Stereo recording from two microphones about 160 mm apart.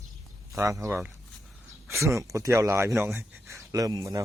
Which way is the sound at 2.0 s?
20° right (ahead or behind).